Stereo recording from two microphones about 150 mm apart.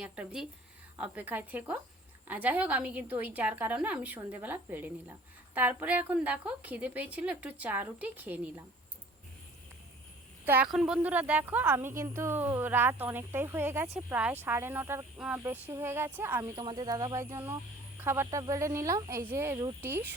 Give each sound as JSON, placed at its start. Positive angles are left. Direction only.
{"t": 0.0, "sound": "speech", "side_deg": -10}
{"t": 10.4, "sound": "speech", "side_deg": -15}
{"t": 16.6, "sound": "speech", "side_deg": -30}